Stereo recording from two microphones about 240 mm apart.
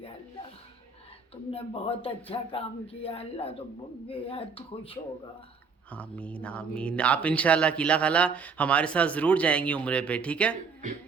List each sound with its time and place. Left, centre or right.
1.5 s speech: left
5.9 s speech: centre